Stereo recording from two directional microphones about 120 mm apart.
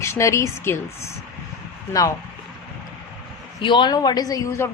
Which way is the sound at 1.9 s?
30° left (ahead or behind).